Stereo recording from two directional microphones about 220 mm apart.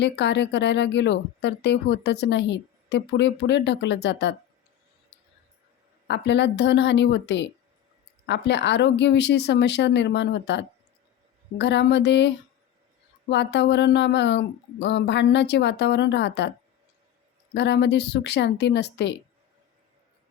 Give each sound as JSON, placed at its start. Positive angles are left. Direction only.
{"t": 0.0, "sound": "speech", "side_deg": 50}
{"t": 5.1, "sound": "a sound", "side_deg": 50}
{"t": 6.1, "sound": "speech", "side_deg": 50}
{"t": 13.3, "sound": "speech", "side_deg": 50}
{"t": 17.5, "sound": "speech", "side_deg": 50}